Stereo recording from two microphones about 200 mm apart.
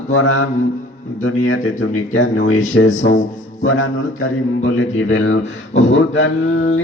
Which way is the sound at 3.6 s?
75° left (ahead or behind).